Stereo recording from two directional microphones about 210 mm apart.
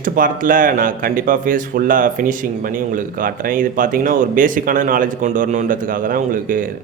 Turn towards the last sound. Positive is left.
turn(degrees=-40)  # may be behind; listen again after turning